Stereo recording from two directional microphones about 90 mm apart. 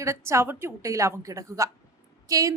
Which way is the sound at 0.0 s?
35° right (ahead or behind).